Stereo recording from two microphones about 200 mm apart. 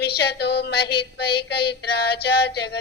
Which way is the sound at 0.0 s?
55° left (ahead or behind).